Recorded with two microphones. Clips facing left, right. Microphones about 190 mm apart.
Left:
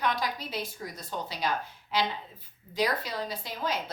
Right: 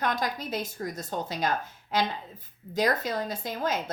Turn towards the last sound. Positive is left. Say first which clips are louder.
# right 3 dB
turn(degrees=-50)  # may be behind; listen again after turning